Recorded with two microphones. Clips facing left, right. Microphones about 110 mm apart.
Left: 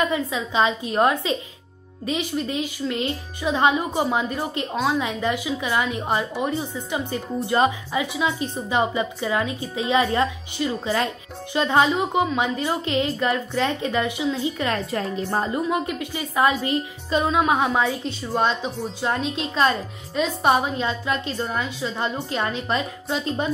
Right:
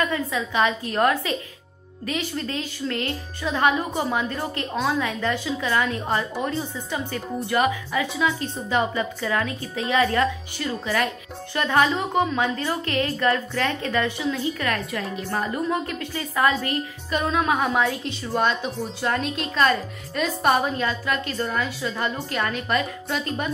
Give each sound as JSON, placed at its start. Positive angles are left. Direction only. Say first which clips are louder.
{"t": 0.0, "sound": "a woman's voice", "louder": "left 1 dB", "side_deg": 20}
{"t": 7.3, "sound": "a woman's voice", "louder": "left 2 dB", "side_deg": 30}
{"t": 15.7, "sound": "a woman's voice", "louder": "left 2 dB", "side_deg": 15}
{"t": 17.6, "sound": "a woman's voice", "louder": "left 1 dB", "side_deg": 5}
{"t": 19.2, "sound": "speech", "louder": "left 1 dB", "side_deg": 0}
{"t": 19.5, "sound": "a woman's voice", "louder": "right 1 dB", "side_deg": 25}